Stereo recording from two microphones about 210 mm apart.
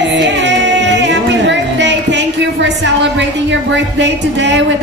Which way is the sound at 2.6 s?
60° right (ahead or behind).